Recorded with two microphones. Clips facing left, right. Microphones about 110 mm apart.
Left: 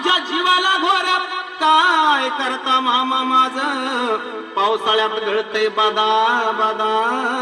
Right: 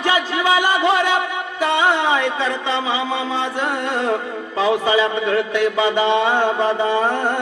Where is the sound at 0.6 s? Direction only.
20° left (ahead or behind).